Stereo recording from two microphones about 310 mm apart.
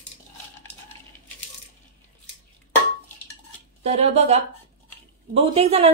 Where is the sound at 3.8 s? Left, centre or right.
Centre.